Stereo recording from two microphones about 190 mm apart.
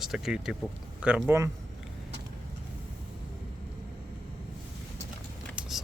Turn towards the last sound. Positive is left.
turn(degrees=-5)  # may be behind; listen again after turning